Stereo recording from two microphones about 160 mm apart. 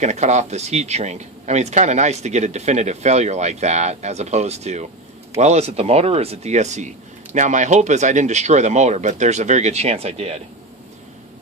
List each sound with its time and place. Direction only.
0.0 s speech: 45° right (ahead or behind)